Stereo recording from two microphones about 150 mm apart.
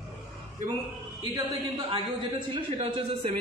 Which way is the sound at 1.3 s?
30° right (ahead or behind).